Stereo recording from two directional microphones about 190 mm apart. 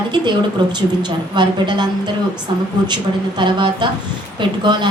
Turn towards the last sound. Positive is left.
turn(degrees=-25)  # may be behind; listen again after turning